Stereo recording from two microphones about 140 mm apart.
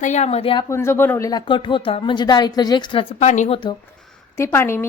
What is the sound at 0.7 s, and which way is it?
Speech, 20° left (ahead or behind).